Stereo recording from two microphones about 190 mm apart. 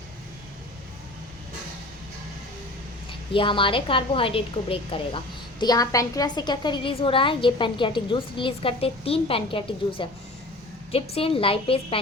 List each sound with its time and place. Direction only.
3.1 s a woman's voice: 25° left (ahead or behind)